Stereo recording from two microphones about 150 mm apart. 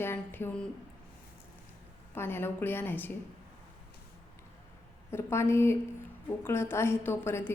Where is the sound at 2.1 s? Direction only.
15° left (ahead or behind).